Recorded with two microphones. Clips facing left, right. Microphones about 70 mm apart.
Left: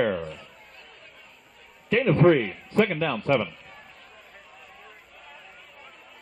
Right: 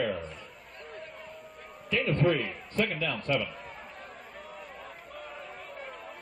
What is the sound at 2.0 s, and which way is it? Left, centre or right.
Speech, left.